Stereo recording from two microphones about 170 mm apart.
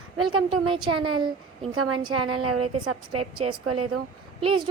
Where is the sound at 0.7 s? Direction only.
30° right (ahead or behind).